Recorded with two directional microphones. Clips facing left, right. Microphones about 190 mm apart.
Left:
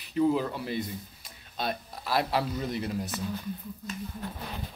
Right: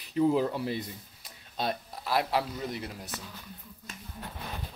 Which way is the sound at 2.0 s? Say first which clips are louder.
Left 1 dB; 15° right (ahead or behind).